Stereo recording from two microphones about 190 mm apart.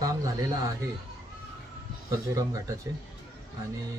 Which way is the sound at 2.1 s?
20° right (ahead or behind).